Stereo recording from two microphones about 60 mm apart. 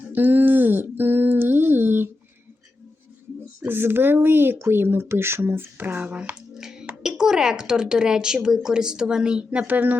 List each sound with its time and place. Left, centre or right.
0.1 s a sound: right
3.7 s speech: right
6.5 s music: centre
7.0 s speech: centre; by 10.0 s right